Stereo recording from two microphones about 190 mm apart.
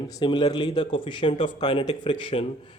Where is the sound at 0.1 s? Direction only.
25° left (ahead or behind).